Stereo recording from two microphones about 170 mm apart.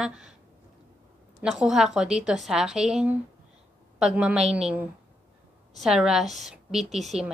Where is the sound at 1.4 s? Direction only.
5° right (ahead or behind).